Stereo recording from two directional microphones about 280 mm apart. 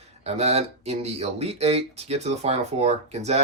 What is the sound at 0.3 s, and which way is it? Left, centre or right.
Speech, right.